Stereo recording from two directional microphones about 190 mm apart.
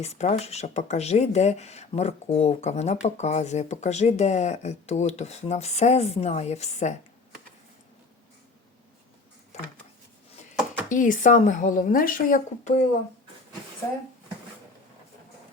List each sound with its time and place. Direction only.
0.0 s speech: 35° left (ahead or behind)
9.5 s a sound: 35° left (ahead or behind)
10.8 s speech: 45° left (ahead or behind)